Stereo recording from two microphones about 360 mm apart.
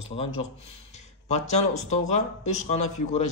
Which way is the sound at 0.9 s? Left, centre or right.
Centre.